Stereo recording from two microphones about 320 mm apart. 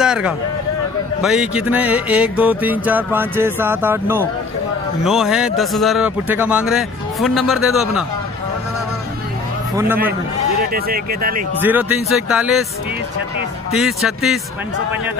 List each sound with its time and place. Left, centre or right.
0.0 s a sound: centre
1.2 s music: centre
10.7 s speech: right
11.6 s music: centre
13.7 s music: centre